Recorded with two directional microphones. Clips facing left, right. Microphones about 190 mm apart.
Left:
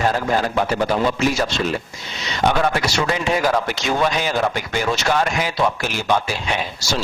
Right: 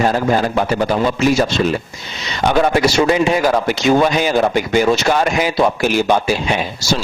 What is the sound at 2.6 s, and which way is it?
A man's voice, 10° right (ahead or behind).